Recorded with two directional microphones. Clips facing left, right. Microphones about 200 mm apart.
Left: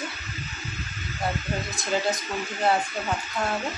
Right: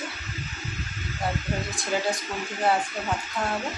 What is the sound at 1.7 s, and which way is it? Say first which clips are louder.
Speech: left 2 dB; 10° right (ahead or behind).